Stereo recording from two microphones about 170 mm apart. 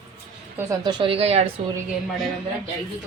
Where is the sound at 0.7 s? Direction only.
25° right (ahead or behind).